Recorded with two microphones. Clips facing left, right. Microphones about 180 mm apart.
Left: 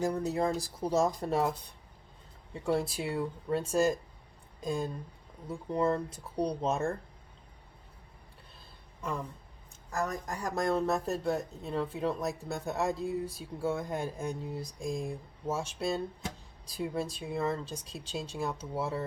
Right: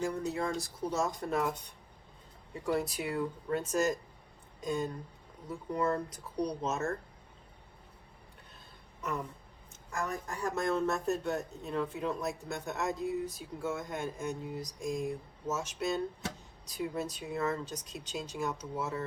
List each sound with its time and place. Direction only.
0.0 s speech: 35° left (ahead or behind)
2.6 s speech: 30° left (ahead or behind)
9.9 s speech: 35° left (ahead or behind)